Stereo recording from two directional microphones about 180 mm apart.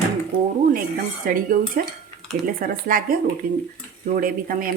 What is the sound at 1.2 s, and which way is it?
Speech, 50° right (ahead or behind).